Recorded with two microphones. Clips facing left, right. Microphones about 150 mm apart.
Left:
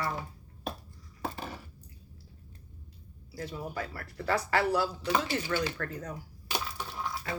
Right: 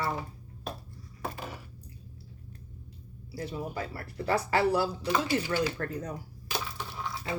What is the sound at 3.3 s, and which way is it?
Speech, 25° right (ahead or behind).